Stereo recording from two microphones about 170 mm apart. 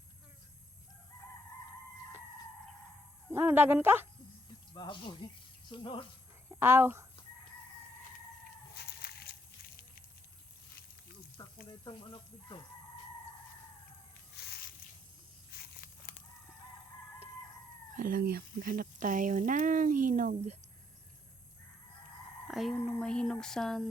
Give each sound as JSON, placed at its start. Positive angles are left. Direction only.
{"t": 3.3, "sound": "speech", "side_deg": -15}
{"t": 4.7, "sound": "speech", "side_deg": 30}
{"t": 6.6, "sound": "speech", "side_deg": -15}
{"t": 8.7, "sound": "a sound", "side_deg": 70}
{"t": 11.4, "sound": "a sound", "side_deg": 20}
{"t": 11.9, "sound": "speech", "side_deg": 25}
{"t": 14.3, "sound": "snake", "side_deg": 65}
{"t": 15.5, "sound": "a sound", "side_deg": 65}
{"t": 17.9, "sound": "speech", "side_deg": -55}
{"t": 22.4, "sound": "speech", "side_deg": 0}